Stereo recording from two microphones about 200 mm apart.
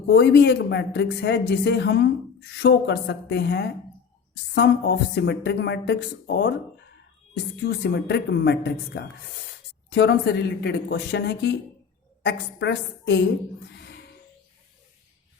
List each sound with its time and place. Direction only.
0.1 s speech: 60° left (ahead or behind)
7.6 s speech: 60° left (ahead or behind)